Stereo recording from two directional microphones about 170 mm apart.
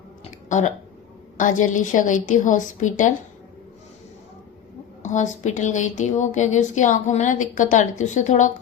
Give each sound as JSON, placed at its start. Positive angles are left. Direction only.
{"t": 0.4, "sound": "a woman's voice", "side_deg": 45}
{"t": 5.0, "sound": "a woman's voice", "side_deg": 45}